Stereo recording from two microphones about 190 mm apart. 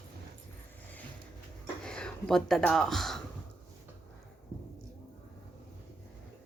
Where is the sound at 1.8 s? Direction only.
5° left (ahead or behind).